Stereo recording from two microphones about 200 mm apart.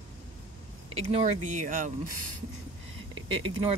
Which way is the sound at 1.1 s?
35° right (ahead or behind).